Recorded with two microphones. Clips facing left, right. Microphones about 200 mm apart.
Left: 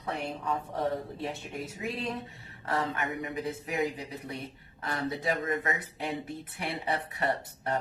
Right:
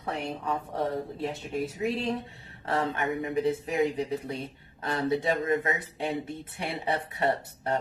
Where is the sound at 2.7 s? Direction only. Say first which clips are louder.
Right 3 dB; 30° right (ahead or behind).